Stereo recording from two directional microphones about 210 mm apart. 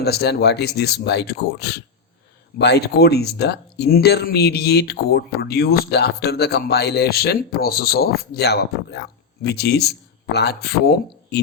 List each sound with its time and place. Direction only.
0.0 s speech: 50° left (ahead or behind)